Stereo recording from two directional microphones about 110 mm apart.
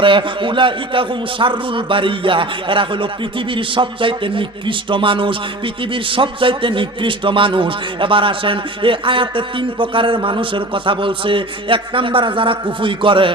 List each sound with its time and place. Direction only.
0.0 s a man's voice: 50° right (ahead or behind)